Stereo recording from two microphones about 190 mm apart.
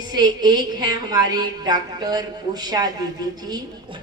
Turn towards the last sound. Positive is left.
turn(degrees=-20)  # may be behind; listen again after turning